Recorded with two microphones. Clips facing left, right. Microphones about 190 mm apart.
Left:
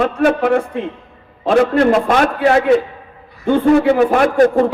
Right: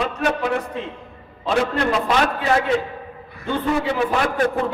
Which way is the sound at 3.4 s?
50° left (ahead or behind).